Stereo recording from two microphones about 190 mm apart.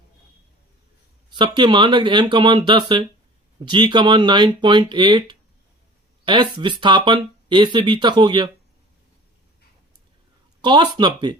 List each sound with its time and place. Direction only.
1.3 s speech: 25° right (ahead or behind)
10.6 s speech: 25° right (ahead or behind)